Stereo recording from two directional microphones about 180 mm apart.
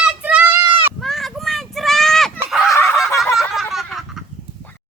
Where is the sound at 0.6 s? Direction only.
30° right (ahead or behind).